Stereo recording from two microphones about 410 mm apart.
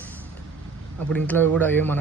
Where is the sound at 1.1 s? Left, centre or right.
Centre.